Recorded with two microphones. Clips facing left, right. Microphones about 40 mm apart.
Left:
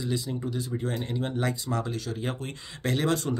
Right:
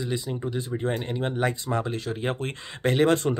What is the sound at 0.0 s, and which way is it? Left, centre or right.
Speech, right.